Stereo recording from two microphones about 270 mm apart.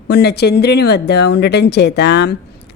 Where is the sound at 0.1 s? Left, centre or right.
Left.